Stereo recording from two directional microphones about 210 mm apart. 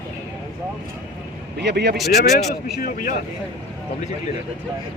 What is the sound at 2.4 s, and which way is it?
Speech, 40° left (ahead or behind).